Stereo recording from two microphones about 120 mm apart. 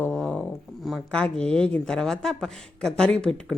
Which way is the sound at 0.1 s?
5° left (ahead or behind).